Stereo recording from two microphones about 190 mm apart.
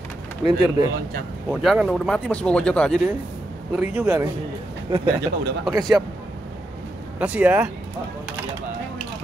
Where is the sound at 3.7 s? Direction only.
10° right (ahead or behind).